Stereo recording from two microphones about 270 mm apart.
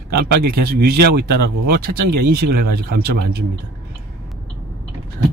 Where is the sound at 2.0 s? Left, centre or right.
Right.